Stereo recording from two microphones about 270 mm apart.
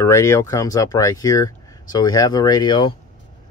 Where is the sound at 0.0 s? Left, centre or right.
Centre.